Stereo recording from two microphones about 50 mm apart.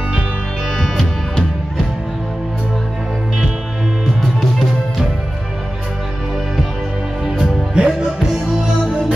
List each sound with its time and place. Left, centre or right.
0.7 s music: centre
4.0 s music: centre
7.2 s music: centre